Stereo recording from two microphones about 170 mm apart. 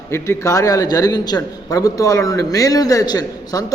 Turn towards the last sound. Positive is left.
turn(degrees=25)  # may be behind; listen again after turning